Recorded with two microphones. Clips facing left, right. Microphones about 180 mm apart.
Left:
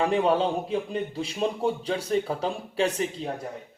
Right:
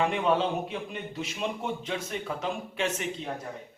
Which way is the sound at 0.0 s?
35° left (ahead or behind).